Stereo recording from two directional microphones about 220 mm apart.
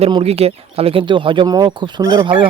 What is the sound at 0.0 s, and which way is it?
Speech, 25° right (ahead or behind).